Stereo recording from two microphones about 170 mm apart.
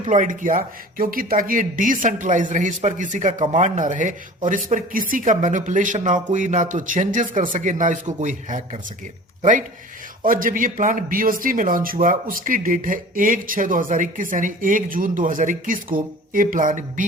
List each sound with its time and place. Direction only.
0.0 s speech: 45° right (ahead or behind)